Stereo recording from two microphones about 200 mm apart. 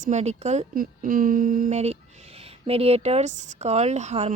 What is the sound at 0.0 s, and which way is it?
Speech, 35° right (ahead or behind).